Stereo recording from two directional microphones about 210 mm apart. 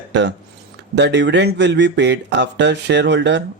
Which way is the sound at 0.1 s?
55° right (ahead or behind).